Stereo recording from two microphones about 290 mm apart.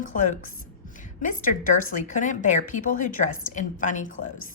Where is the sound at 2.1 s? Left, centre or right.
Left.